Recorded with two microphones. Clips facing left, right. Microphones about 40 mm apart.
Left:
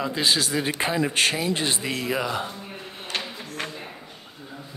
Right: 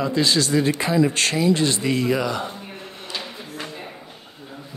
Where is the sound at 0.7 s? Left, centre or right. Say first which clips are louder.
Right 5 dB; left.